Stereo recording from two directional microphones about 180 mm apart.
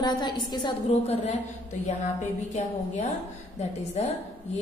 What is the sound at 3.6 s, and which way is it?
Speech, 35° left (ahead or behind).